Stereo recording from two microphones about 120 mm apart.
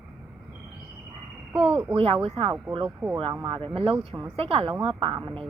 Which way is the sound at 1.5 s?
50° right (ahead or behind).